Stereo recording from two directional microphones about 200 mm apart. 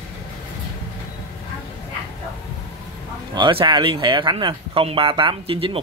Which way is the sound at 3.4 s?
25° right (ahead or behind).